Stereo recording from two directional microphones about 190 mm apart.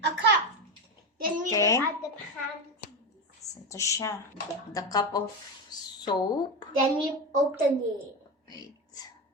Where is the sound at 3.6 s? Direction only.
15° left (ahead or behind).